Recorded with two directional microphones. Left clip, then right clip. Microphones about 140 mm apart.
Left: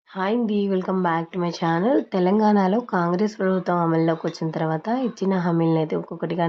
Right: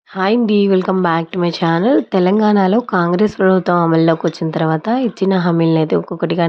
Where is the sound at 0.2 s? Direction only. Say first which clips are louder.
Right 9 dB; 35° right (ahead or behind).